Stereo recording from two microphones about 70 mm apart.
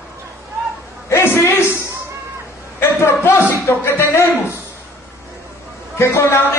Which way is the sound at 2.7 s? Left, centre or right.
Left.